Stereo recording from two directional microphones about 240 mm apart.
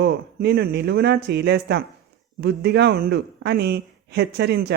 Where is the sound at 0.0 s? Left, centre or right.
Right.